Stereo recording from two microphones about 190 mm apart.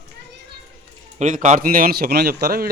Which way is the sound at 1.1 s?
40° right (ahead or behind).